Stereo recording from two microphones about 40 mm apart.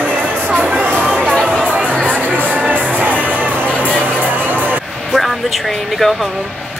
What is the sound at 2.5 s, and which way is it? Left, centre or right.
Music, right.